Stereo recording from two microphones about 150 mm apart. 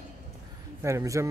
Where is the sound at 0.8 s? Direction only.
20° right (ahead or behind).